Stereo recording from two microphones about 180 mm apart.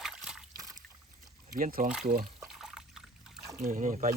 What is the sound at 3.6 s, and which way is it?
Speech, 45° right (ahead or behind).